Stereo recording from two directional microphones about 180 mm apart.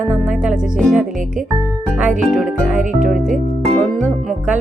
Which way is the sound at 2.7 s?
45° right (ahead or behind).